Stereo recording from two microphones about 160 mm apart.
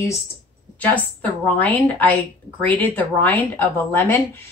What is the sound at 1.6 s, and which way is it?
A woman's voice, 10° left (ahead or behind).